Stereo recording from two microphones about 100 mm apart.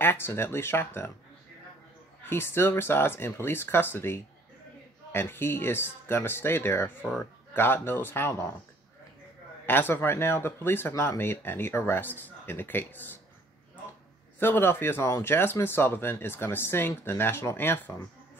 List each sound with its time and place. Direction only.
0.0 s speech: 25° left (ahead or behind)
2.2 s speech: 25° left (ahead or behind)
9.7 s speech: 20° left (ahead or behind)
14.4 s speech: 20° left (ahead or behind)